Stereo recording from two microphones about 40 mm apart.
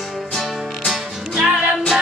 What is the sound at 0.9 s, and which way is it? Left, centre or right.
Music, centre.